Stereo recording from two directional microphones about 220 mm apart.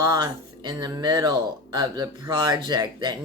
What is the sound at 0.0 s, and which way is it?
Speech, 20° right (ahead or behind).